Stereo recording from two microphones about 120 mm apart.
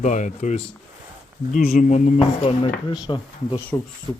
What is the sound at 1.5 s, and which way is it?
Speech, 90° left.